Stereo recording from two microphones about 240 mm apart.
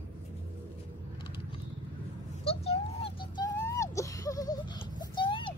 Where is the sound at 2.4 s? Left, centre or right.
Left.